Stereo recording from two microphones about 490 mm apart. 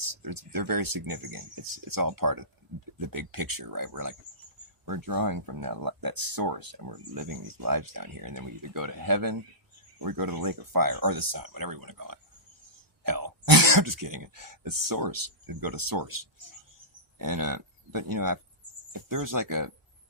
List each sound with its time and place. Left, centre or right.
0.0 s speech: right